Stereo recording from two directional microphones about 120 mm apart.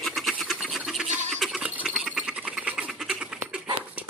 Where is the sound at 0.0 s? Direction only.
Centre (ahead or behind).